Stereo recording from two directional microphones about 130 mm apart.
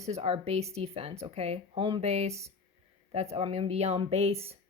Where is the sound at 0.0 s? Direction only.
55° right (ahead or behind).